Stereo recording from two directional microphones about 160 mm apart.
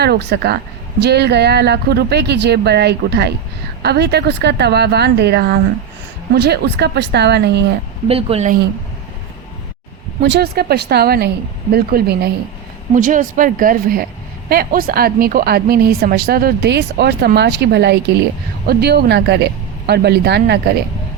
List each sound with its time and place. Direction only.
0.0 s a woman's voice: 90° right
8.0 s speech: 40° right (ahead or behind)
10.2 s a woman's voice: 80° right
11.7 s a woman's voice: 70° right (ahead or behind)
12.9 s a woman's voice: 55° right (ahead or behind); by 20.7 s 90° right